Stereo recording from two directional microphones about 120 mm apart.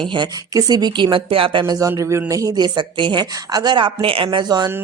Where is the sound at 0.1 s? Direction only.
35° right (ahead or behind).